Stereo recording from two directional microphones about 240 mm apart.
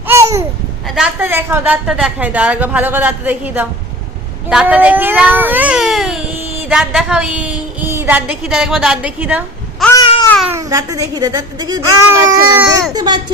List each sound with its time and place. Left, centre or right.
0.1 s babbling: centre
0.9 s a woman's voice: centre
9.8 s babbling: centre
10.2 s babbling: centre
10.5 s a woman's voice: centre